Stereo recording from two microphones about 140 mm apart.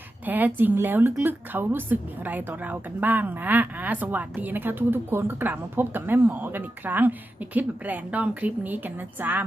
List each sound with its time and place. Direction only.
0.3 s speech: 10° right (ahead or behind)